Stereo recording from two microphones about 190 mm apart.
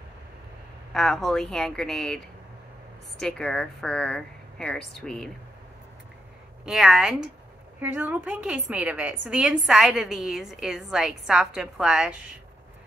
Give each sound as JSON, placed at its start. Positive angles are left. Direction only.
{"t": 0.9, "sound": "a woman's voice", "side_deg": 0}
{"t": 6.6, "sound": "a woman's voice", "side_deg": -5}